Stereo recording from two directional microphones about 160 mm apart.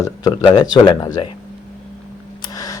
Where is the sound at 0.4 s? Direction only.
25° left (ahead or behind).